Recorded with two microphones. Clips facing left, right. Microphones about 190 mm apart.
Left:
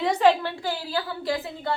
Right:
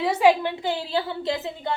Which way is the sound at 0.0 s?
10° right (ahead or behind).